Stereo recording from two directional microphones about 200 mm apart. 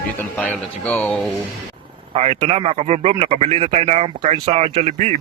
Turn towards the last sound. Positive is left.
turn(degrees=-35)  # may be behind; listen again after turning